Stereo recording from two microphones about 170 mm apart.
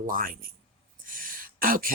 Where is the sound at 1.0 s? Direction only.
55° right (ahead or behind).